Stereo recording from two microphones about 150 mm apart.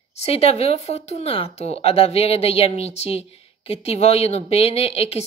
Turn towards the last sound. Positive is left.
turn(degrees=40)  # may be behind; listen again after turning